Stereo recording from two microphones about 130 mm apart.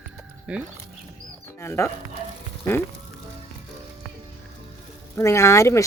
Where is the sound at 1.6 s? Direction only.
20° left (ahead or behind).